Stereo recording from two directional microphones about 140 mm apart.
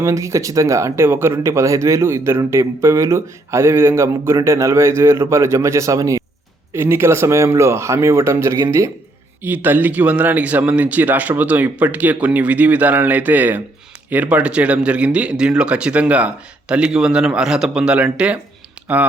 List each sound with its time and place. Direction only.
0.0 s speech: 20° right (ahead or behind)